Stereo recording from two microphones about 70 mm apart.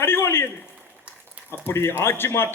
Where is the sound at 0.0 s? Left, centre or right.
Left.